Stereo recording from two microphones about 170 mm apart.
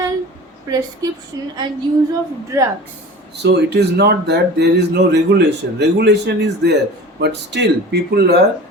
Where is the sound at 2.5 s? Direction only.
15° right (ahead or behind).